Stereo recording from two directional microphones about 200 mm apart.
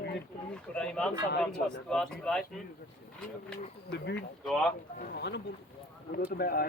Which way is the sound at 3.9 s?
55° left (ahead or behind).